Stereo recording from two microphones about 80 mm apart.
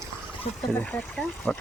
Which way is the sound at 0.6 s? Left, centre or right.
Centre.